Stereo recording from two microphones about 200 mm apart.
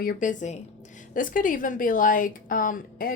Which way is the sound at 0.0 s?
45° left (ahead or behind).